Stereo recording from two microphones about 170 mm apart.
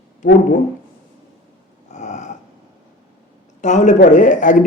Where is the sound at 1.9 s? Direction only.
45° left (ahead or behind).